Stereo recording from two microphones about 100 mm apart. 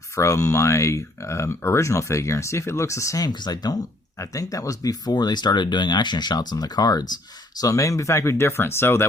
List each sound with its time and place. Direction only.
0.2 s speech: 30° left (ahead or behind)
3.2 s speech: 45° left (ahead or behind); by 9.0 s 25° left (ahead or behind)